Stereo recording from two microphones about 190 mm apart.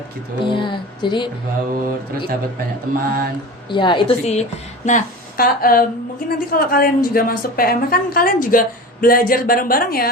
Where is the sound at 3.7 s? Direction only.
25° left (ahead or behind).